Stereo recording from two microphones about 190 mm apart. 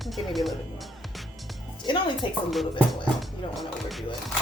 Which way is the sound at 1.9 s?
25° left (ahead or behind).